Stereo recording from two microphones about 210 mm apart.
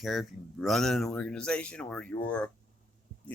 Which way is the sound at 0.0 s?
Centre (ahead or behind).